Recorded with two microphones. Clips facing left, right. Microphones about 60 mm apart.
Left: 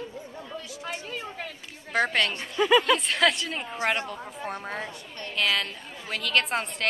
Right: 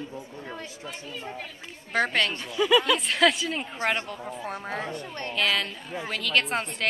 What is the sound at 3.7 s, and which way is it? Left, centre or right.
Speech, centre.